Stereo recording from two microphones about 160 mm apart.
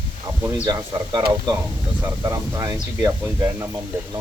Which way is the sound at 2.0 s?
15° right (ahead or behind).